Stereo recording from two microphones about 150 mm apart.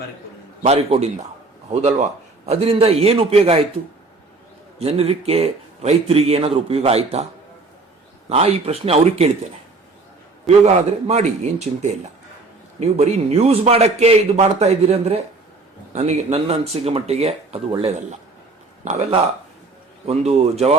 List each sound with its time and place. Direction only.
0.6 s speech: 45° right (ahead or behind)
4.8 s speech: 45° right (ahead or behind)
8.3 s speech: 45° right (ahead or behind)
10.6 s speech: 45° right (ahead or behind)
20.1 s speech: 45° right (ahead or behind)